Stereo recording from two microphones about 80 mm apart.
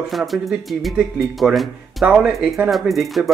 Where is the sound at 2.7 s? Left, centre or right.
Centre.